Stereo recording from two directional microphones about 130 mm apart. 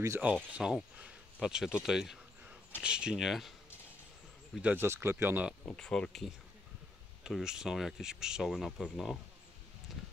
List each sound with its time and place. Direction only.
0.5 s speech: 5° right (ahead or behind)
0.9 s a sound: 10° right (ahead or behind)
2.8 s speech: 5° right (ahead or behind)
4.6 s speech: 15° right (ahead or behind)
5.7 s speech: 5° left (ahead or behind)